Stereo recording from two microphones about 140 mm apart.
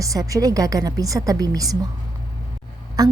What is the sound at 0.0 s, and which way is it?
A woman's voice, 25° right (ahead or behind).